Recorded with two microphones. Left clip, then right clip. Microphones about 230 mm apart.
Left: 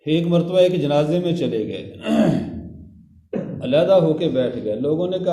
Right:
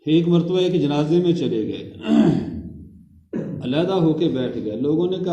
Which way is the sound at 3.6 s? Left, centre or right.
Left.